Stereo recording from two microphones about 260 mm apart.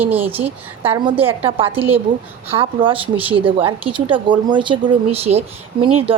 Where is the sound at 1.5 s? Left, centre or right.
Centre.